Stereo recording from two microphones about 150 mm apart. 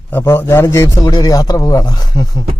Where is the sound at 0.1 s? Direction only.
15° left (ahead or behind).